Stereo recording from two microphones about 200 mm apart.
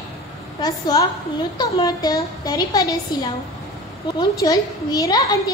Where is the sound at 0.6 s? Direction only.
20° left (ahead or behind).